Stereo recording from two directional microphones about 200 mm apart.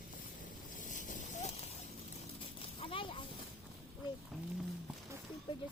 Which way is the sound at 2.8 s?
25° left (ahead or behind).